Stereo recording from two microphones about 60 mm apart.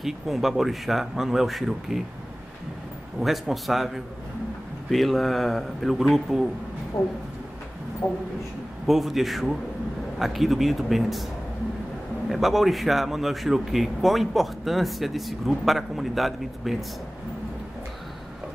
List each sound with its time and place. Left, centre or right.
0.0 s a man's voice: centre
3.2 s a man's voice: centre
7.0 s speech: left
8.8 s a man's voice: centre
12.3 s a man's voice: centre